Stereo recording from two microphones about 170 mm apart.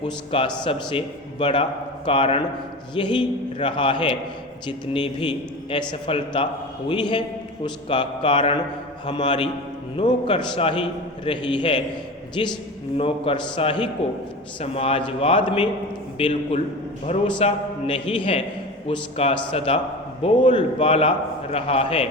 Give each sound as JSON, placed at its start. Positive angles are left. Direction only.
{"t": 0.0, "sound": "a man's voice", "side_deg": 35}